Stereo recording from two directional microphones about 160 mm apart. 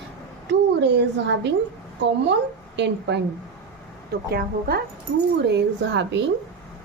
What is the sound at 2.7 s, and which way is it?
Speech, 90° right.